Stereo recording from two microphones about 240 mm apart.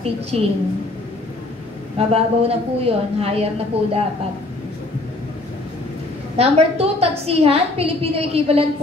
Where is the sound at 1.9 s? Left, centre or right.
Right.